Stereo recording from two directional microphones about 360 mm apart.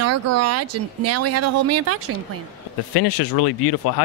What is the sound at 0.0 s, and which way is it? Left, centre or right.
Speech, right.